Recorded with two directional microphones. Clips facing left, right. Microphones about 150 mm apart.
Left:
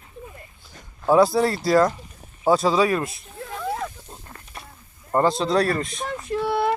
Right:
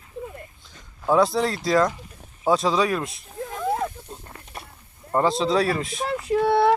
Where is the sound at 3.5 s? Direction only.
20° right (ahead or behind).